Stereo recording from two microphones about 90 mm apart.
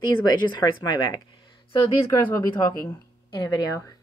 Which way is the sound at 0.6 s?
50° left (ahead or behind).